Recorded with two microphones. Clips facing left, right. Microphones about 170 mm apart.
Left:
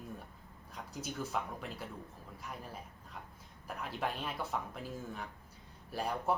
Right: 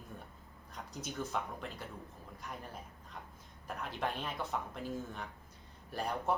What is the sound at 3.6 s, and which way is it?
Speech, 5° left (ahead or behind).